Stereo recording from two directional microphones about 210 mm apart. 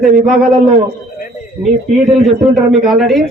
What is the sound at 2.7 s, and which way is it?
Speech, centre (ahead or behind).